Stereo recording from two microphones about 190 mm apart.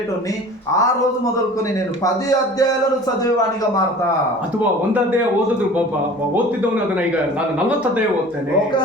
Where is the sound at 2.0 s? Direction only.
20° left (ahead or behind).